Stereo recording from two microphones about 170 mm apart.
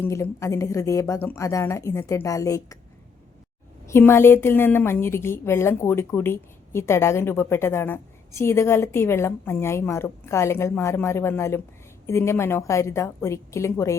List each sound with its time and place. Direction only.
0.0 s a woman's voice: 15° left (ahead or behind)
3.8 s a woman's voice: 15° left (ahead or behind)